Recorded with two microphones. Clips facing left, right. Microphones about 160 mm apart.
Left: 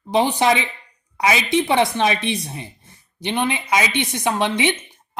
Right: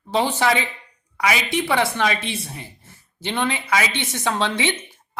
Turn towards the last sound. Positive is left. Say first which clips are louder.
# left 3 dB
turn(degrees=15)  # may be behind; listen again after turning